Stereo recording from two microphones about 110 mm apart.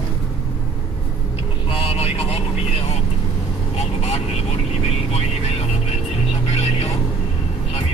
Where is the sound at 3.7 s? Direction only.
85° left.